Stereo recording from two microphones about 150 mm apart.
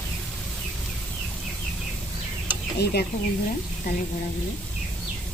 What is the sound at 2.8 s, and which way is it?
Stir, 90° left.